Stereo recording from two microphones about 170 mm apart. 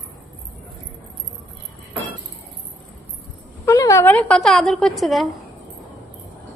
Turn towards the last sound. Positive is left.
turn(degrees=0)  # may be behind; listen again after turning